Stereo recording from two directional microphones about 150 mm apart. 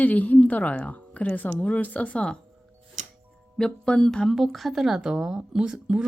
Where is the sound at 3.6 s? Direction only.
5° left (ahead or behind).